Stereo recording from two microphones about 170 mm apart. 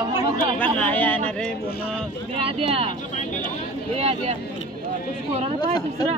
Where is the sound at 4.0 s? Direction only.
35° right (ahead or behind).